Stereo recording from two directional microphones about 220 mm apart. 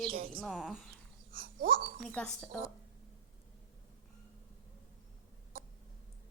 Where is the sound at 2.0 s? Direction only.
5° left (ahead or behind).